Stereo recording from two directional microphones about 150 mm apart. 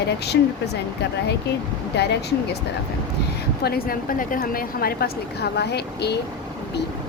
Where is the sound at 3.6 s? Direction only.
80° left.